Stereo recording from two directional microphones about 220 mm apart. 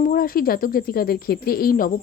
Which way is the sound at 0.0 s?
40° left (ahead or behind).